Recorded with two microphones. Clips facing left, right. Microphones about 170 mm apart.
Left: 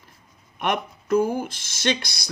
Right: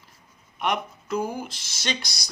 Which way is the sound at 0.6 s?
50° left (ahead or behind).